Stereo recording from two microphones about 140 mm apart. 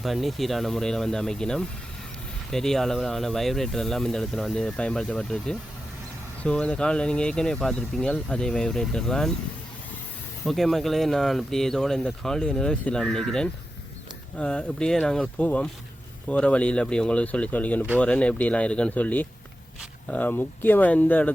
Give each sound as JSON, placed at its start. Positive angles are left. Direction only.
{"t": 0.0, "sound": "speech", "side_deg": 0}
{"t": 10.4, "sound": "speech", "side_deg": 0}